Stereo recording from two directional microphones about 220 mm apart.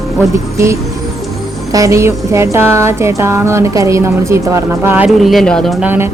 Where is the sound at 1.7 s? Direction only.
15° right (ahead or behind).